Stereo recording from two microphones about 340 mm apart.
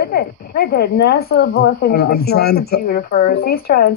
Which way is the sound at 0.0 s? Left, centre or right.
Left.